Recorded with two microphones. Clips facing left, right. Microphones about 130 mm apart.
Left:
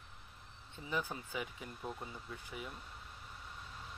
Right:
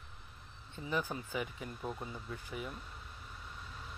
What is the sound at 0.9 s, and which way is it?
Speech, 25° right (ahead or behind).